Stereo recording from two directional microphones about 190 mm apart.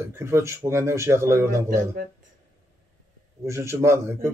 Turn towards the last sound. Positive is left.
turn(degrees=-15)  # may be behind; listen again after turning